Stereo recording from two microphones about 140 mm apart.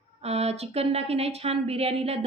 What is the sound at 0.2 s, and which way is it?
A woman's voice, 45° right (ahead or behind).